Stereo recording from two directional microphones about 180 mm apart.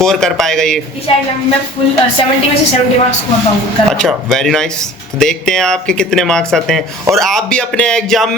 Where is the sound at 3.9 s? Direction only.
Centre (ahead or behind).